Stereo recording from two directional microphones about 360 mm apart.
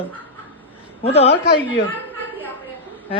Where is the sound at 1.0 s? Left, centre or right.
Centre.